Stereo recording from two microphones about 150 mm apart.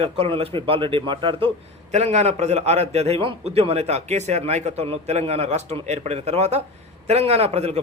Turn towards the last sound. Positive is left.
turn(degrees=-45)  # may be behind; listen again after turning